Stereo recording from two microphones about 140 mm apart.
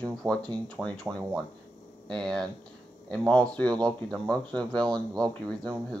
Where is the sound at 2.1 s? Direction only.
5° left (ahead or behind).